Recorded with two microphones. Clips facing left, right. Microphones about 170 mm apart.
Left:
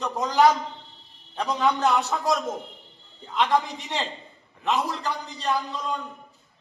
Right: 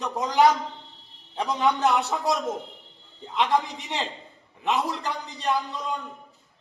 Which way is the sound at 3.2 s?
20° right (ahead or behind).